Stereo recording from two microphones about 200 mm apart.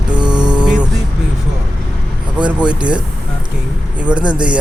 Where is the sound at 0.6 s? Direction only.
5° right (ahead or behind).